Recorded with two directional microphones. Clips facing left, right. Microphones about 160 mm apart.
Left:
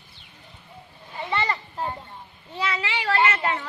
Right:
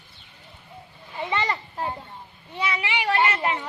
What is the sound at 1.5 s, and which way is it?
Children playing, 10° right (ahead or behind).